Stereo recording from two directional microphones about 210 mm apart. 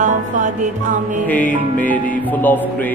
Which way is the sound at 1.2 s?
5° left (ahead or behind).